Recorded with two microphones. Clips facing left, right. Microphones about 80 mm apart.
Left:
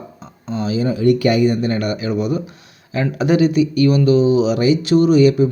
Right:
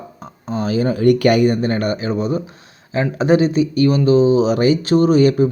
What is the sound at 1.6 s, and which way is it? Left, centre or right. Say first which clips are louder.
Speech: right 1 dB; right.